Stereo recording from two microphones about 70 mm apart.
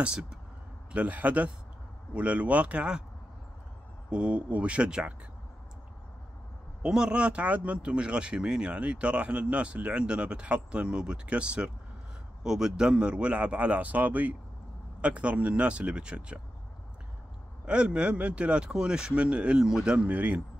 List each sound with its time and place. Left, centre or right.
0.0 s speech: centre
0.9 s speech: right
4.1 s speech: centre
6.8 s speech: centre
17.6 s speech: centre